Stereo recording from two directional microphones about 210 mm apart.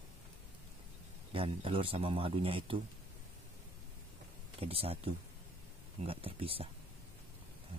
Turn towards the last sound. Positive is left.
turn(degrees=-25)  # may be behind; listen again after turning